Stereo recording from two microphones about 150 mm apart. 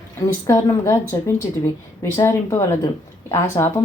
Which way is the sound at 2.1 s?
15° left (ahead or behind).